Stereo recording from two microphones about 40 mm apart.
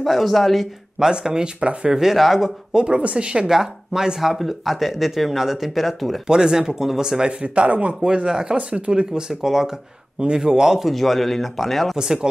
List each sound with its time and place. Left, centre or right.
0.0 s speech: centre
1.2 s speech: centre
1.6 s speech: right
1.9 s speech: centre
2.7 s speech: right
3.4 s speech: centre
4.3 s speech: centre
6.2 s speech: centre
7.4 s speech: right
8.5 s speech: right
9.3 s speech: centre
11.9 s speech: centre